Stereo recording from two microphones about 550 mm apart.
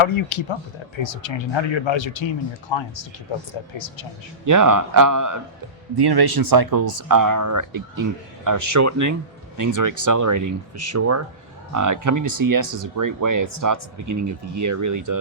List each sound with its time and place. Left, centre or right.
0.0 s speech: left
4.4 s speech: right
12.6 s speech: right
13.0 s speech: right